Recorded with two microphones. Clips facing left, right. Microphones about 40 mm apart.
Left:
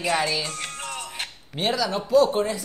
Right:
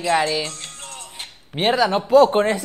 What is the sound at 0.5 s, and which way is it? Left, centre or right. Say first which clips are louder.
Music: left 4 dB; left.